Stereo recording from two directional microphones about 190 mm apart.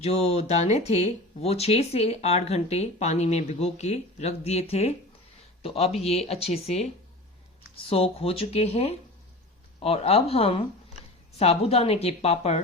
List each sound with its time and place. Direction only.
0.0 s speech: 35° left (ahead or behind)
7.9 s speech: 30° left (ahead or behind)